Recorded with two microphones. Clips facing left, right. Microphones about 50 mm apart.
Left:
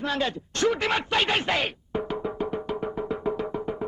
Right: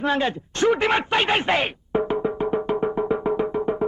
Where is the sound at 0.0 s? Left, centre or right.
Right.